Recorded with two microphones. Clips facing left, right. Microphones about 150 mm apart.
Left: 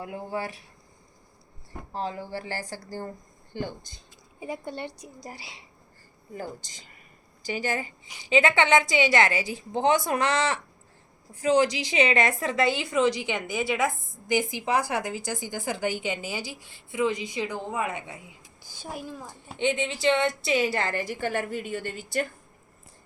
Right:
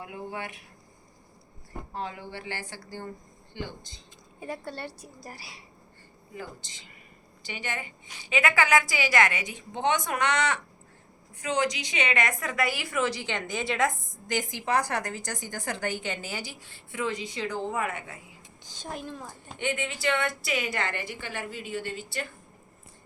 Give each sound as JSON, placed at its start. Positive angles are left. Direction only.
{"t": 0.0, "sound": "a woman's voice", "side_deg": 40}
{"t": 1.9, "sound": "a woman's voice", "side_deg": 35}
{"t": 4.4, "sound": "a woman's voice", "side_deg": 15}
{"t": 6.3, "sound": "a woman's voice", "side_deg": 40}
{"t": 8.0, "sound": "a woman's voice", "side_deg": 10}
{"t": 8.3, "sound": "a woman's voice", "side_deg": 25}
{"t": 19.5, "sound": "a woman's voice", "side_deg": 20}